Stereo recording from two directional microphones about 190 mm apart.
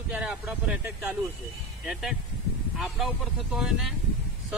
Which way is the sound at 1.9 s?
Centre (ahead or behind).